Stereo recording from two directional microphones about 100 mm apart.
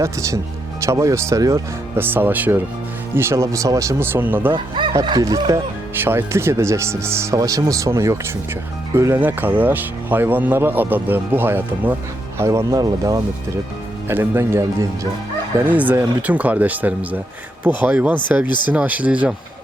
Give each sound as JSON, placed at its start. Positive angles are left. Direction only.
{"t": 0.0, "sound": "speech", "side_deg": -30}
{"t": 2.0, "sound": "speech", "side_deg": -20}
{"t": 4.5, "sound": "speech", "side_deg": -55}
{"t": 5.0, "sound": "speech", "side_deg": -40}
{"t": 6.0, "sound": "speech", "side_deg": -25}
{"t": 9.2, "sound": "speech", "side_deg": -20}
{"t": 12.4, "sound": "speech", "side_deg": -30}
{"t": 14.1, "sound": "speech", "side_deg": -20}